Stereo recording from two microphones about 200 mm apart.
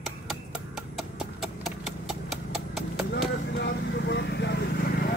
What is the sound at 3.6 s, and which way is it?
Vehicle, 60° left (ahead or behind).